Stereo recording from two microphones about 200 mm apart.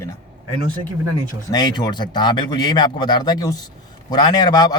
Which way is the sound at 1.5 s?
20° left (ahead or behind).